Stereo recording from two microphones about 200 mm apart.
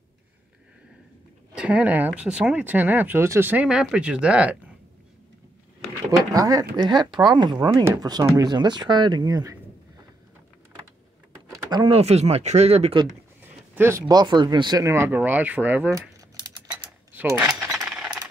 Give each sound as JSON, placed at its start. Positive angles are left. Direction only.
{"t": 1.5, "sound": "speech", "side_deg": -5}
{"t": 6.3, "sound": "speech", "side_deg": -20}
{"t": 11.7, "sound": "speech", "side_deg": -25}
{"t": 13.0, "sound": "speech", "side_deg": -10}
{"t": 17.1, "sound": "coin", "side_deg": -10}